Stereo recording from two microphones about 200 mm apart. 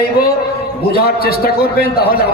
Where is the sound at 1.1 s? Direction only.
50° left (ahead or behind).